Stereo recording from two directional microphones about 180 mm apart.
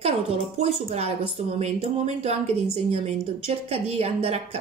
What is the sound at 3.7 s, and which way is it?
Speech, 35° right (ahead or behind).